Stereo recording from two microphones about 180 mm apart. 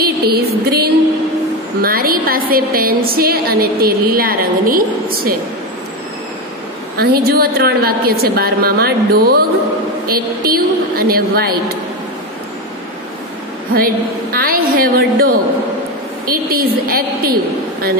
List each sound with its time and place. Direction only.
0.0 s music: 60° right (ahead or behind)
1.8 s a woman's voice: 55° right (ahead or behind)
7.0 s a woman's voice: 55° right (ahead or behind)
13.7 s a woman's voice: 55° right (ahead or behind)
16.3 s a woman's voice: 55° right (ahead or behind)